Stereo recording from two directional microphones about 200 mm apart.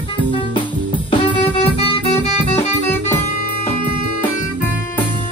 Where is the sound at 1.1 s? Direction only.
30° left (ahead or behind).